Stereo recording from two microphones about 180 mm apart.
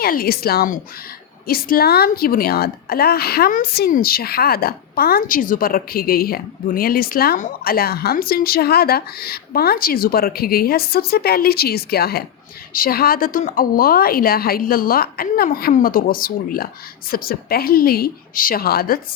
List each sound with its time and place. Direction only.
0.0 s a woman's voice: 55° left (ahead or behind)